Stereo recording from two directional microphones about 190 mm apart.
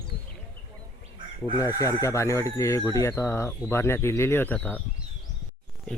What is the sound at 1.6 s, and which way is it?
Speech, 15° left (ahead or behind).